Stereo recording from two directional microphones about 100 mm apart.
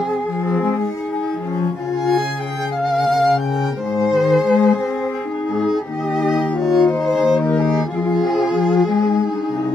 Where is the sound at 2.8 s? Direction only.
Centre (ahead or behind).